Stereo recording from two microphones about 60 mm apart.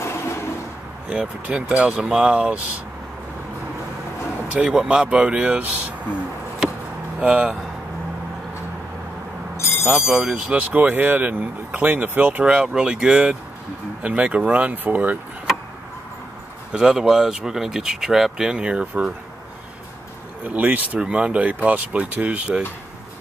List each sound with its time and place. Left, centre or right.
0.0 s a sound: left
1.8 s speech: centre
4.6 s speech: centre
7.2 s speech: centre
9.8 s speech: centre; by 12.4 s right
12.4 s speech: centre
16.7 s speech: centre
20.4 s speech: right